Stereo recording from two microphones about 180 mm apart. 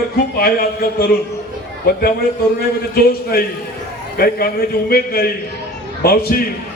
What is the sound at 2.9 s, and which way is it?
A man's voice, 55° left (ahead or behind).